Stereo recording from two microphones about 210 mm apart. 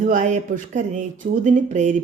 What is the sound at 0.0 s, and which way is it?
Speech, 35° right (ahead or behind).